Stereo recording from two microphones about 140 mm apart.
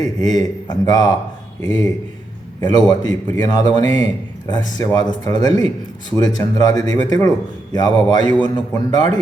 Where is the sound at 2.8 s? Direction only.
30° left (ahead or behind).